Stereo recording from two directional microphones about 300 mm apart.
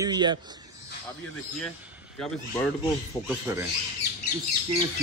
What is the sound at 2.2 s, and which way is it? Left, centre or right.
A man's voice, centre.